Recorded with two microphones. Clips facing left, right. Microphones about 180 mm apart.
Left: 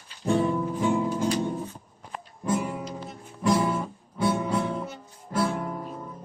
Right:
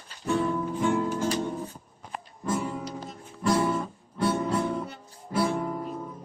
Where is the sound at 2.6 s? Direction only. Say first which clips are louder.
Left 1 dB; 15° left (ahead or behind).